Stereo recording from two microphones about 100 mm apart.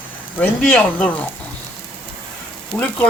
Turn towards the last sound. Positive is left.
turn(degrees=10)  # may be behind; listen again after turning